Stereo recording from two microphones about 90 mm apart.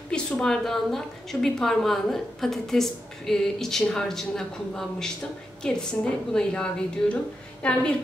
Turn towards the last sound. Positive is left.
turn(degrees=10)  # may be behind; listen again after turning